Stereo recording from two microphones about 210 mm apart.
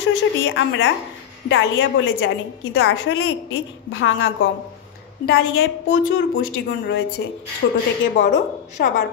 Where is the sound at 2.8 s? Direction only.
55° left (ahead or behind).